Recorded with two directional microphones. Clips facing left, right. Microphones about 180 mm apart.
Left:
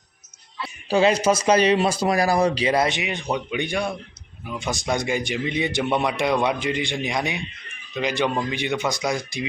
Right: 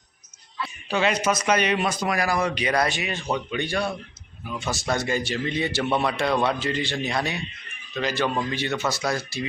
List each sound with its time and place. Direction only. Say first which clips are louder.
0.6 s a man's voice: left 5 dB; 30° left (ahead or behind); by 9.5 s 15° left (ahead or behind)